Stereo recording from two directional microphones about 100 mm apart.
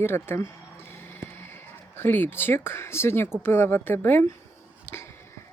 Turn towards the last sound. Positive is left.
turn(degrees=25)  # may be behind; listen again after turning